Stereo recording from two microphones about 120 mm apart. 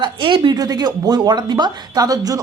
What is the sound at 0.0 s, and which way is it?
Speech, 40° right (ahead or behind).